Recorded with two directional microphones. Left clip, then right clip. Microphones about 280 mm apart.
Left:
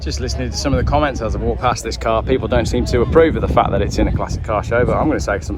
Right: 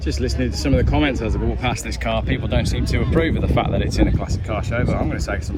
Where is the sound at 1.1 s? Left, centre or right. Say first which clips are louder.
Left 2 dB; left.